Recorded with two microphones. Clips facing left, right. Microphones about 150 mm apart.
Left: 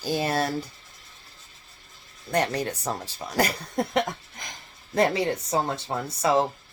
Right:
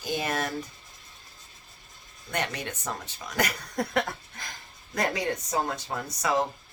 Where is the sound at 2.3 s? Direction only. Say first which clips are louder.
Left 7 dB; 35° left (ahead or behind).